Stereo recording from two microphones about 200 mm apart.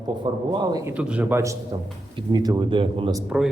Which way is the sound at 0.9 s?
5° right (ahead or behind).